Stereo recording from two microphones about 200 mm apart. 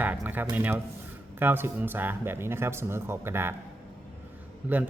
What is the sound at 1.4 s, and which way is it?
Speech, 10° right (ahead or behind).